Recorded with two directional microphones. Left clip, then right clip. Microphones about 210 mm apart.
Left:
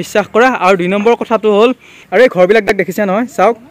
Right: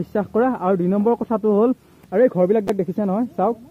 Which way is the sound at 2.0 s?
10° left (ahead or behind).